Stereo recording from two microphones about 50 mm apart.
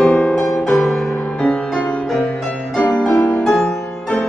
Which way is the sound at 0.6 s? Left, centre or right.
Centre.